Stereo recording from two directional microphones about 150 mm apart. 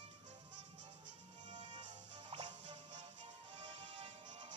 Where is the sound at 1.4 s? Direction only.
50° right (ahead or behind).